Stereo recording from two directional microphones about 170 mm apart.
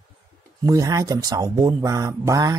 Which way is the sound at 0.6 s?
20° right (ahead or behind).